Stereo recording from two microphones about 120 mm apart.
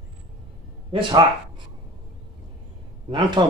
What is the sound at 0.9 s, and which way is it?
Speech, 40° right (ahead or behind).